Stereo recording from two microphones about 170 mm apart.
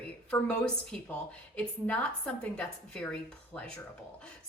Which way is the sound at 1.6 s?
10° left (ahead or behind).